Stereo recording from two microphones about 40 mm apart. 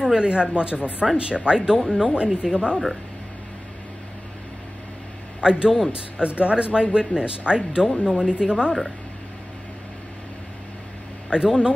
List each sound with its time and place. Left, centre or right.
0.0 s speech: right
5.4 s speech: right
11.2 s speech: centre